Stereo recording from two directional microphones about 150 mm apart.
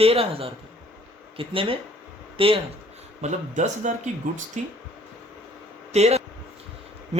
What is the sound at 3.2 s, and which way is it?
Speech, 55° right (ahead or behind).